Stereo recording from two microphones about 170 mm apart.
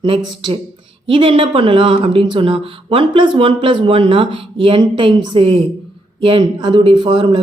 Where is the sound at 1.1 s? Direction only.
30° right (ahead or behind).